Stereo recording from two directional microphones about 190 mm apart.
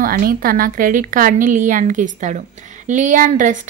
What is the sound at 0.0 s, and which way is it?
A woman's voice, 50° right (ahead or behind).